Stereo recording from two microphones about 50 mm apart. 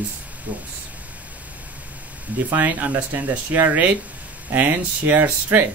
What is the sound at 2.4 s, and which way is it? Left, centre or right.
Speech, right.